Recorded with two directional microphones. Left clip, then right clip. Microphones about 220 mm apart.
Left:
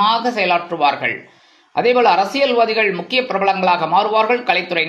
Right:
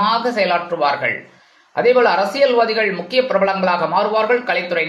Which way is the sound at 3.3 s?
35° left (ahead or behind).